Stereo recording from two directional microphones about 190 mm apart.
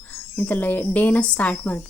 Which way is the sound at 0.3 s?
10° left (ahead or behind).